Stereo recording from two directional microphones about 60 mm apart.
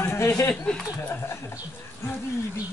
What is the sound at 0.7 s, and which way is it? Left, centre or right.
Speech, centre.